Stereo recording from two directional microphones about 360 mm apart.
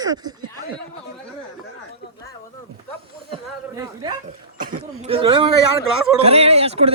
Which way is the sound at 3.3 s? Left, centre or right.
Centre.